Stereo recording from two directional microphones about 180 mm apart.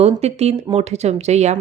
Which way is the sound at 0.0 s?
35° right (ahead or behind).